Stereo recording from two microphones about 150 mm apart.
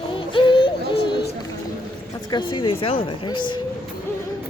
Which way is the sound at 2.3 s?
35° left (ahead or behind).